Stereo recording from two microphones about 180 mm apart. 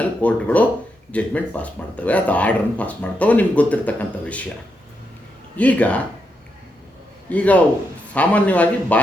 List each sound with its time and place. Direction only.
0.0 s speech: 5° left (ahead or behind)
5.5 s speech: 10° left (ahead or behind)
7.3 s speech: 10° left (ahead or behind)